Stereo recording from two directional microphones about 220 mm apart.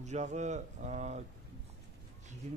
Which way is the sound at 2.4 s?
30° right (ahead or behind).